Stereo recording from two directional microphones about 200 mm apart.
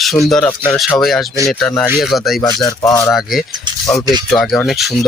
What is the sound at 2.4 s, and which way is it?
Speech, 15° left (ahead or behind).